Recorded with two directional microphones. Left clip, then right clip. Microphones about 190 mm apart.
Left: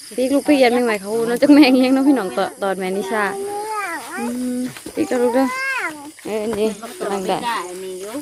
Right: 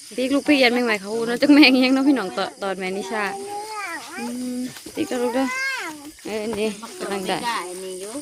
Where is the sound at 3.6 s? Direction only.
40° left (ahead or behind).